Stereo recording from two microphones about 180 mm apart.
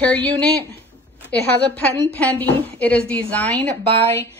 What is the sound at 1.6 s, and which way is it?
A woman's voice, 10° left (ahead or behind).